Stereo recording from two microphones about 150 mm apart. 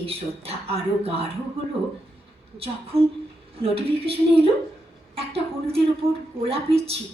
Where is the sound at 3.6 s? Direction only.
40° right (ahead or behind).